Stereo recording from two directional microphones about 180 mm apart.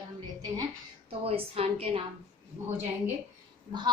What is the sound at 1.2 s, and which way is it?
Speech, 35° right (ahead or behind).